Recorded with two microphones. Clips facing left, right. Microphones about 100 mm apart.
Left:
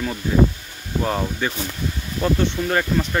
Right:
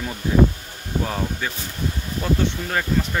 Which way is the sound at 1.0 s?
10° left (ahead or behind).